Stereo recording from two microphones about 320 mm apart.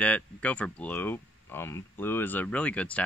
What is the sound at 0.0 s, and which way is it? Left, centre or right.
Speech, centre.